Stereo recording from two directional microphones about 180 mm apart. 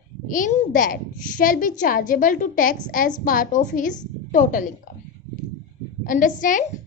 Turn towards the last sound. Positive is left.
turn(degrees=45)  # may be behind; listen again after turning